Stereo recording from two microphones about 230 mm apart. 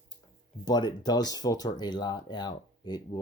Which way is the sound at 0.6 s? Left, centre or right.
Centre.